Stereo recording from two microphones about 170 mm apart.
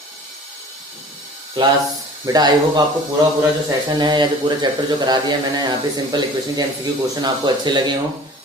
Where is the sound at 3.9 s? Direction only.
25° right (ahead or behind).